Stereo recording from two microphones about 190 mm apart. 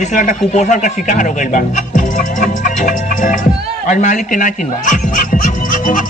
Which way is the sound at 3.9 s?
40° left (ahead or behind).